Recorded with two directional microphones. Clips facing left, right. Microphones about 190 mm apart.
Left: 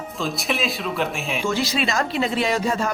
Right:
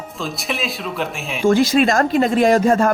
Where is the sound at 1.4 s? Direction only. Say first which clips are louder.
Right 11 dB; 50° right (ahead or behind).